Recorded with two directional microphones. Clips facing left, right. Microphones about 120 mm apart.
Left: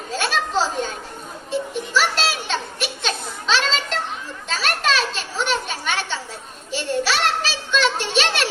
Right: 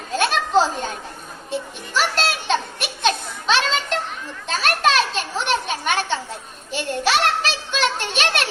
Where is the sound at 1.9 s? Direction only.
50° right (ahead or behind).